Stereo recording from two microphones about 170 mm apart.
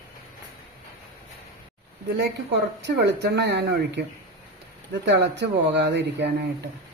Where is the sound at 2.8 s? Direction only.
85° right.